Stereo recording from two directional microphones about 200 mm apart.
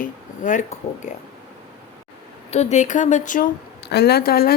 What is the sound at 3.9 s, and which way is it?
Speech, 55° left (ahead or behind).